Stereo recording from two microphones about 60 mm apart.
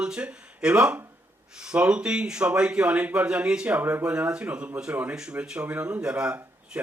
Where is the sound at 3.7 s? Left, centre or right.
Right.